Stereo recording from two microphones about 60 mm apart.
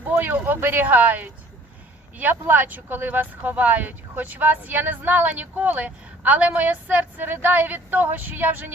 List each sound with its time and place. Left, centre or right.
0.1 s speech: right